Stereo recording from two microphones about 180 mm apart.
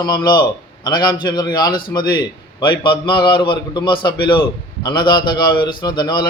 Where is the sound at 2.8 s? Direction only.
25° left (ahead or behind).